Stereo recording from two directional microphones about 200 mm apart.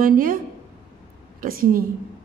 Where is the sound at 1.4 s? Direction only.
45° right (ahead or behind).